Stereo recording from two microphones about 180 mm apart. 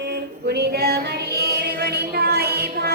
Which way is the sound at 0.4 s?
65° right (ahead or behind).